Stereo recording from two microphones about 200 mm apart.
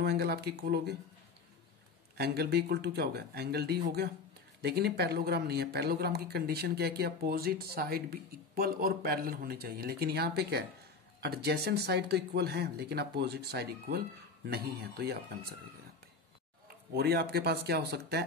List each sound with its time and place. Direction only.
0.0 s speech: 55° right (ahead or behind)
2.1 s speech: 55° right (ahead or behind)
16.9 s speech: 50° right (ahead or behind)